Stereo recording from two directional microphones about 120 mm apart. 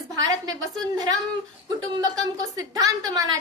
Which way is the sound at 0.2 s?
30° right (ahead or behind).